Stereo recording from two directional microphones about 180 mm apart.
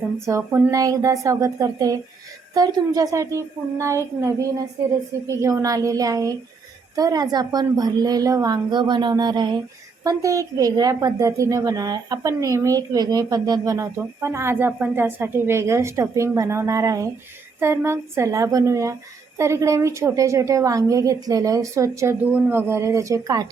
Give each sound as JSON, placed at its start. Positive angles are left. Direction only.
{"t": 0.3, "sound": "a woman's voice", "side_deg": -15}